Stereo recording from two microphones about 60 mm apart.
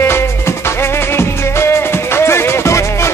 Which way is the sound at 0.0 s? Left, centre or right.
Left.